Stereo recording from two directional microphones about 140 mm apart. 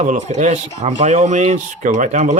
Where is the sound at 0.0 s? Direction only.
60° right (ahead or behind).